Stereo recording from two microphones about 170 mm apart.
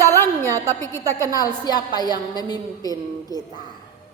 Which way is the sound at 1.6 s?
25° left (ahead or behind).